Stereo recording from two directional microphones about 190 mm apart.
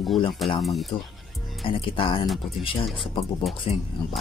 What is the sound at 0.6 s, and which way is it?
Speech, centre (ahead or behind).